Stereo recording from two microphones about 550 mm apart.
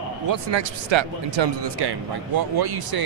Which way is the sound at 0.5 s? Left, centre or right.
Right.